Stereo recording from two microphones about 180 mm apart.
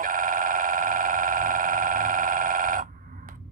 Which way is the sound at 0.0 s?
50° right (ahead or behind).